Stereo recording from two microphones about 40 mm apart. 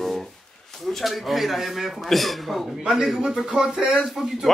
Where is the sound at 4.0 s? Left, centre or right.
Centre.